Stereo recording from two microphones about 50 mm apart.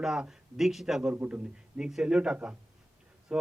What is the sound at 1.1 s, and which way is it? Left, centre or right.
Speech, right.